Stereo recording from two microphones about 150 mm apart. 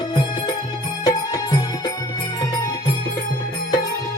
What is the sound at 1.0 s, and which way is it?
Music, 25° left (ahead or behind).